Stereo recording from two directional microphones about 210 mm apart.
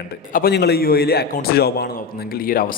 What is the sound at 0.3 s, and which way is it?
A man's voice, 50° left (ahead or behind).